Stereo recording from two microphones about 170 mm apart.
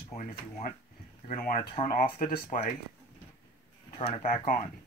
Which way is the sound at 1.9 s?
50° left (ahead or behind).